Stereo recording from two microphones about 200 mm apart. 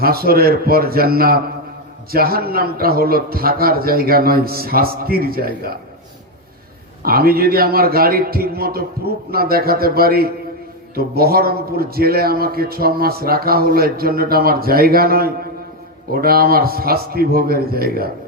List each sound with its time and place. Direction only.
0.0 s a man's voice: 50° right (ahead or behind)
7.0 s a man's voice: 50° right (ahead or behind)